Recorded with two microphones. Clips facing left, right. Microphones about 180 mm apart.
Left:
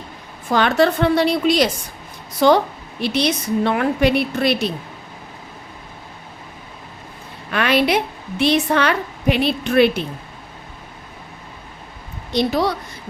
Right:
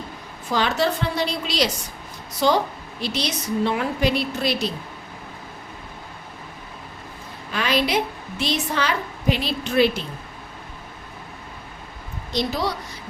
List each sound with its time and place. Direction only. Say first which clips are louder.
0.4 s a woman's voice: left 6 dB; 60° left (ahead or behind)
7.5 s a woman's voice: left 5 dB; 60° left (ahead or behind)
12.3 s a woman's voice: left 6 dB; 60° left (ahead or behind)